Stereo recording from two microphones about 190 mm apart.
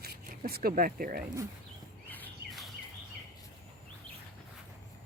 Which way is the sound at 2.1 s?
5° left (ahead or behind).